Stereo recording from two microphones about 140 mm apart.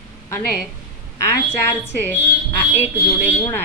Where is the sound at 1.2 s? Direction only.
20° left (ahead or behind).